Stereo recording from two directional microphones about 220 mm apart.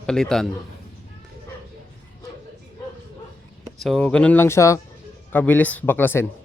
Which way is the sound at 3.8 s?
Centre (ahead or behind).